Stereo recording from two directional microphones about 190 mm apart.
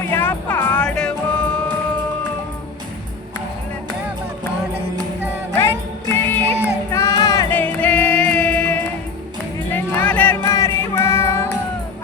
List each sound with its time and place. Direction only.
0.1 s music: 10° left (ahead or behind)
6.1 s music: 10° left (ahead or behind)